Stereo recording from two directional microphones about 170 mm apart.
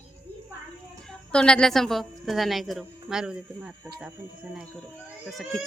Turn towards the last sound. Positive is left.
turn(degrees=0)  # may be behind; listen again after turning